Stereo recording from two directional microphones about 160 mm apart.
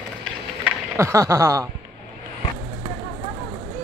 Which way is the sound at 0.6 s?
20° right (ahead or behind).